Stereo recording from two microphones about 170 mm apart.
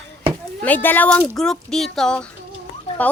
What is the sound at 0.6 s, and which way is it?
A woman's voice, 10° left (ahead or behind).